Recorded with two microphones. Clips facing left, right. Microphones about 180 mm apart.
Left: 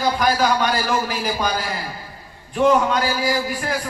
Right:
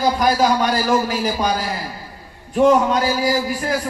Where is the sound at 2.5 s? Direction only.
40° right (ahead or behind).